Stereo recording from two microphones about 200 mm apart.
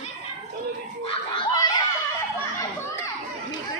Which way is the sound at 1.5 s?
20° left (ahead or behind).